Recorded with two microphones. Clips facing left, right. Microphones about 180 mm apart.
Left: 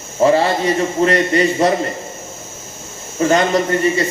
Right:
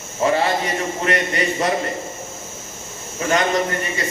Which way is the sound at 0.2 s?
35° left (ahead or behind).